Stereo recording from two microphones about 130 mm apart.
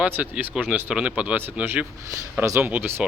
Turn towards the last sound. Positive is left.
turn(degrees=-15)  # may be behind; listen again after turning